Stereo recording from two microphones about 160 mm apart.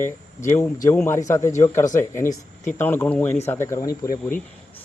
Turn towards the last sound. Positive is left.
turn(degrees=20)  # may be behind; listen again after turning